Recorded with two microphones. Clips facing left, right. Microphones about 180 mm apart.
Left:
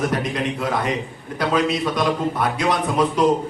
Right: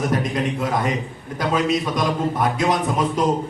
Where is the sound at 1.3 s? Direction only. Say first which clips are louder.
Even; 45° right (ahead or behind).